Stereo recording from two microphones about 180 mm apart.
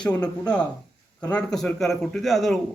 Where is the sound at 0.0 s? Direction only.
5° left (ahead or behind).